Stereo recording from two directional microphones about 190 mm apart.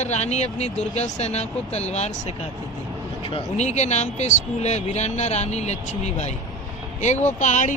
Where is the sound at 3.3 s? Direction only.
35° left (ahead or behind).